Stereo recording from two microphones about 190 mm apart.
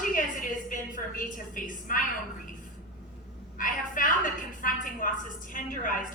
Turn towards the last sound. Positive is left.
turn(degrees=45)  # may be behind; listen again after turning